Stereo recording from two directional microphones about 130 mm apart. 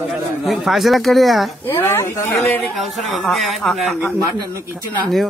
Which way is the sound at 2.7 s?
Centre (ahead or behind).